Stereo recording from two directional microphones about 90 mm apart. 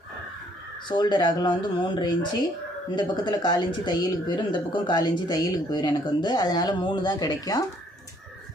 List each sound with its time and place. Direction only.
0.9 s speech: 60° left (ahead or behind)
4.9 s speech: 50° left (ahead or behind)